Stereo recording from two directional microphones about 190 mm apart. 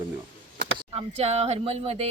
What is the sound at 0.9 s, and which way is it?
Speech, 30° right (ahead or behind).